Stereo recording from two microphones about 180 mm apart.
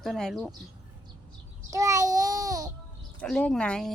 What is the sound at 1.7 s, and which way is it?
Child singing, 20° right (ahead or behind).